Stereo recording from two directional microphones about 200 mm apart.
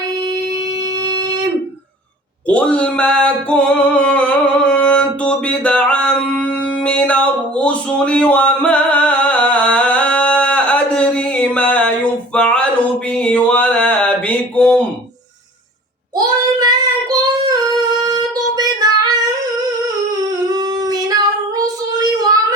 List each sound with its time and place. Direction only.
2.5 s music: 5° left (ahead or behind)
13.1 s a sound: 5° left (ahead or behind)
16.1 s child singing: 20° right (ahead or behind)
20.1 s singing: 20° right (ahead or behind)
22.2 s child singing: 20° right (ahead or behind)